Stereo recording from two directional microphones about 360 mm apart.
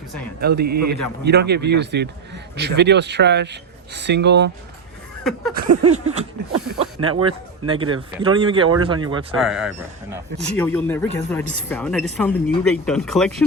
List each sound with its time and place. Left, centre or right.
0.3 s a man's voice: right
5.2 s speech: centre
5.6 s a sound: right
7.0 s speech: centre
9.4 s speech: centre